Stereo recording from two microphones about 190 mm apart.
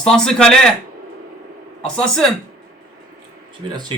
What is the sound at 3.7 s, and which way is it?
Speech, 20° right (ahead or behind).